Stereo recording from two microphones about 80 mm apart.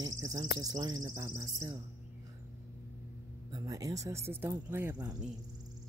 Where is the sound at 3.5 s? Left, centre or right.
Right.